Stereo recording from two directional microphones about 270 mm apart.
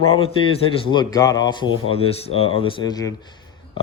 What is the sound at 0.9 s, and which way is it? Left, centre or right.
Speech, centre.